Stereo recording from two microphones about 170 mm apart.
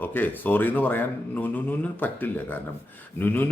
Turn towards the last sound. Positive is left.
turn(degrees=10)  # may be behind; listen again after turning